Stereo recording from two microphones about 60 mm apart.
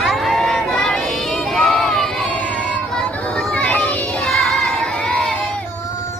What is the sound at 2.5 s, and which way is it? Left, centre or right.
Children playing, centre.